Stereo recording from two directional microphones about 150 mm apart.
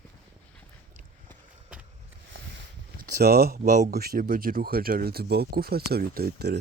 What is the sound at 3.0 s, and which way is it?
Speech, 90° right.